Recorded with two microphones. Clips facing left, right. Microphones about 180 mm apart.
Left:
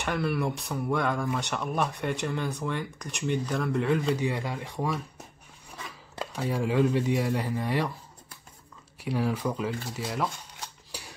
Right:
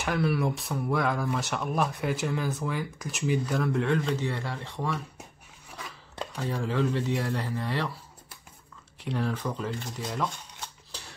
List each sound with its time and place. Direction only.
0.0 s speech: centre (ahead or behind)
6.1 s speech: 10° left (ahead or behind)
9.0 s speech: 10° left (ahead or behind)
10.9 s scissors: 10° left (ahead or behind)